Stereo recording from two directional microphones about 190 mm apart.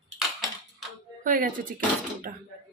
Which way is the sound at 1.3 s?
45° right (ahead or behind).